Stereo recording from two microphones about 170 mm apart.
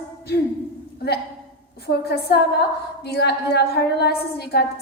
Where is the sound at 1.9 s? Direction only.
70° left (ahead or behind).